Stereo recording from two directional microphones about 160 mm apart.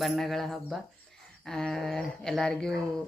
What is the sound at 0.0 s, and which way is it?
Speech, centre (ahead or behind).